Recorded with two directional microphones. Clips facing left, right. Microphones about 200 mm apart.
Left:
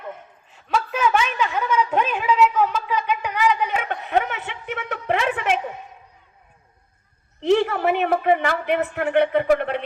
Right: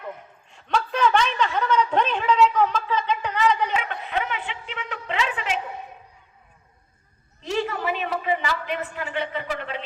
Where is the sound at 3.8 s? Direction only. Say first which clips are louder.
Left 5 dB; 50° left (ahead or behind).